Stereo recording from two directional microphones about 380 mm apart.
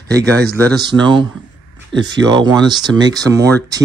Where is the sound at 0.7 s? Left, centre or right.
Centre.